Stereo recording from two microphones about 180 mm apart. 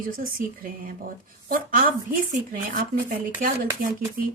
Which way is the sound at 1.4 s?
50° right (ahead or behind).